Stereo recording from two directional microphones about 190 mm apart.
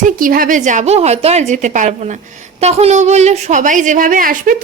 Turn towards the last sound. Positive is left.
turn(degrees=-45)  # may be behind; listen again after turning